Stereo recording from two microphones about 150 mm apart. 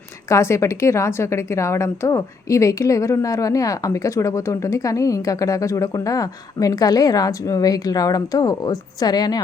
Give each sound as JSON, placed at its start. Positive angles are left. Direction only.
{"t": 0.3, "sound": "a woman's voice", "side_deg": 20}